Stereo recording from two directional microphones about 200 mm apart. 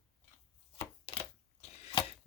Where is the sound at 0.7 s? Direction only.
25° left (ahead or behind).